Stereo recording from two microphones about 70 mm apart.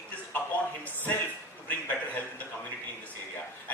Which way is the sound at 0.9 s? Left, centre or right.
Left.